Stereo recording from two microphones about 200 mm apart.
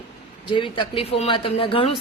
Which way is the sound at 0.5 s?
25° left (ahead or behind).